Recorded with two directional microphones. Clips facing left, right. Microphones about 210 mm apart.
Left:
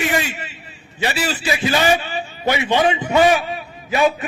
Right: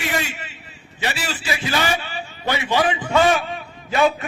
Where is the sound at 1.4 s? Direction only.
15° left (ahead or behind).